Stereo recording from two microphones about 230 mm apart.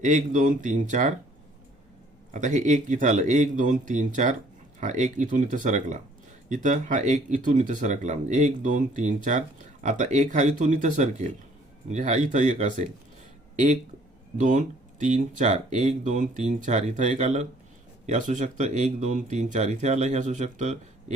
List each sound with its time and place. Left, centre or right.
0.0 s speech: right
2.3 s speech: right
14.3 s speech: right